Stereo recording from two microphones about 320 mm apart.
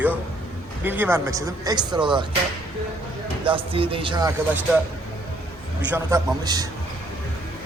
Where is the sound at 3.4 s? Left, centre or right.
Centre.